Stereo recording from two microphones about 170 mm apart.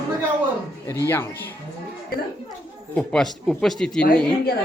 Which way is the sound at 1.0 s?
10° left (ahead or behind).